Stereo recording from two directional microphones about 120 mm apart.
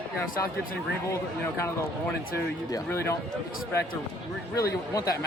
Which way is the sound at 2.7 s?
20° left (ahead or behind).